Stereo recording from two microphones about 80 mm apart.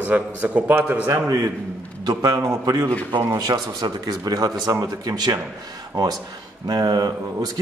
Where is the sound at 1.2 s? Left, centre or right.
Right.